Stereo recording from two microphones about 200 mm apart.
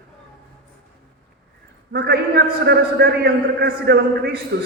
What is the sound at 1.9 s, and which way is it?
A man's voice, 50° right (ahead or behind).